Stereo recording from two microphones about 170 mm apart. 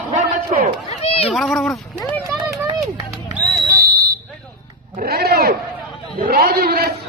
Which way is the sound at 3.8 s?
60° right (ahead or behind).